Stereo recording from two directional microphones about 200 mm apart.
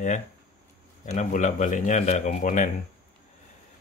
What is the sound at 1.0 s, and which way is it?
Speech, 40° left (ahead or behind).